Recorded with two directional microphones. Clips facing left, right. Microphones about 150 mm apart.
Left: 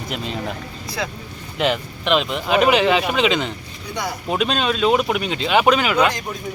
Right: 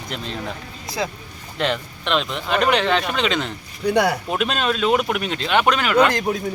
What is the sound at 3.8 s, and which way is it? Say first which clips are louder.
Speech: right 9 dB; 70° right (ahead or behind).